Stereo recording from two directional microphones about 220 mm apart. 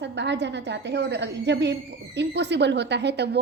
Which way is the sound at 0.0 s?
50° right (ahead or behind).